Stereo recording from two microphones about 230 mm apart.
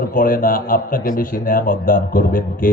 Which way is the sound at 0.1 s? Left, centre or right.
Left.